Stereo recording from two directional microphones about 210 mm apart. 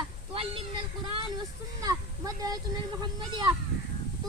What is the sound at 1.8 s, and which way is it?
Speech, 15° right (ahead or behind).